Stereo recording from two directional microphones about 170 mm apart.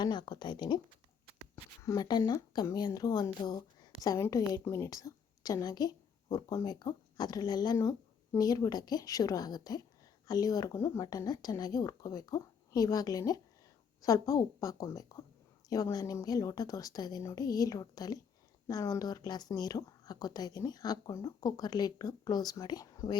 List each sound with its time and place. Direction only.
0.0 s speech: 25° left (ahead or behind)
1.8 s speech: 20° left (ahead or behind)